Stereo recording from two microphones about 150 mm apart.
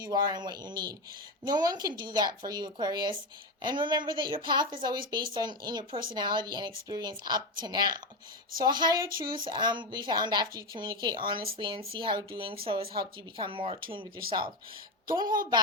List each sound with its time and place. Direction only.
0.0 s a woman's voice: 30° right (ahead or behind)